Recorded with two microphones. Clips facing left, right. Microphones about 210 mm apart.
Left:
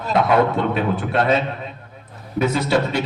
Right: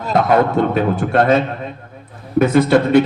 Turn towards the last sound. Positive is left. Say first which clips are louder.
# right 8 dB
turn(degrees=-55)  # may be behind; listen again after turning